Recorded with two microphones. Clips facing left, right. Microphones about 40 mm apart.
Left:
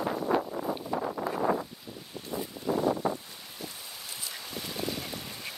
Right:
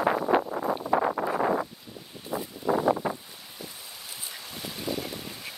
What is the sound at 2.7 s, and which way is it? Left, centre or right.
Wind noise, right.